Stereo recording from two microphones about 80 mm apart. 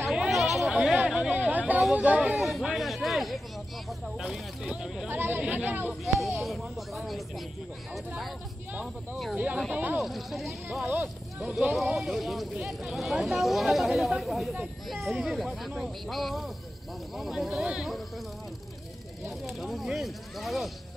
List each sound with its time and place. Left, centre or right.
0.1 s chatter: centre
1.3 s speech: right
2.3 s speech: centre
5.0 s speech: right
6.4 s speech: centre
8.8 s speech: centre
9.7 s speech: centre
10.0 s speech: centre
10.7 s speech: centre
11.7 s speech: centre
19.6 s speech: centre